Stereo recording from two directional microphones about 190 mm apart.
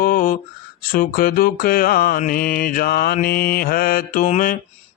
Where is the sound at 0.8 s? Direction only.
50° left (ahead or behind).